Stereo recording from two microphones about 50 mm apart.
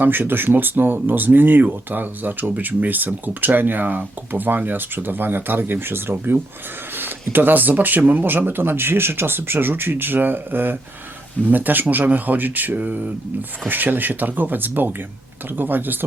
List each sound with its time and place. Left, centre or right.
0.0 s speech: right